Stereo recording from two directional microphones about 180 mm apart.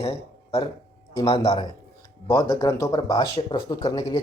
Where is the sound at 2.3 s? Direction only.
20° left (ahead or behind).